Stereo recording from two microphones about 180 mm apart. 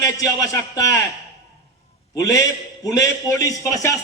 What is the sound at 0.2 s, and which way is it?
Speech, 20° left (ahead or behind).